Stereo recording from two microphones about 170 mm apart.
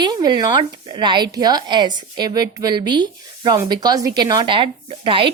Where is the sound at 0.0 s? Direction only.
25° right (ahead or behind).